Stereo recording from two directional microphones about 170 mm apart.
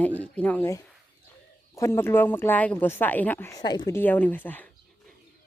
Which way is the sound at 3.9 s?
10° left (ahead or behind).